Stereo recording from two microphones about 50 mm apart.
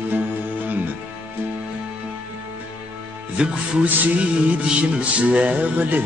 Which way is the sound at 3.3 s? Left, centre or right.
Right.